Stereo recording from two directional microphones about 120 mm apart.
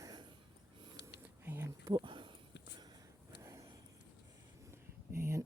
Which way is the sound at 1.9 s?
40° right (ahead or behind).